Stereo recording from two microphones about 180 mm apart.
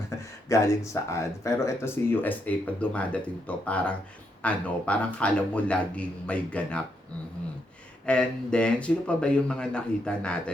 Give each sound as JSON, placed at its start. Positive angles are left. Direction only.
{"t": 0.1, "sound": "a sound", "side_deg": 15}
{"t": 0.4, "sound": "speech", "side_deg": 15}
{"t": 8.0, "sound": "speech", "side_deg": 5}